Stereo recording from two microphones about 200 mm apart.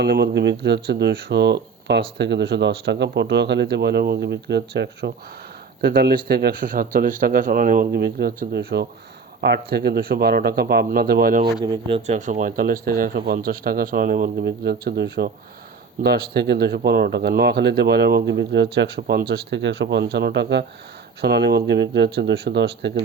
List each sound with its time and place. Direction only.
0.0 s speech: 55° right (ahead or behind)
11.6 s speech: 25° right (ahead or behind); by 22.9 s 60° right (ahead or behind)